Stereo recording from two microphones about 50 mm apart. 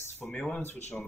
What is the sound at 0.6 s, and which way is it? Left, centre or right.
Speech, left.